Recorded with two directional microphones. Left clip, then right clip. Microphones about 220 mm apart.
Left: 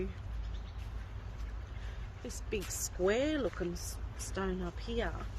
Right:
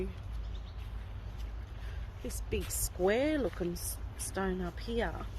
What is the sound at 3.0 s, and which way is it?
Speech, 40° right (ahead or behind).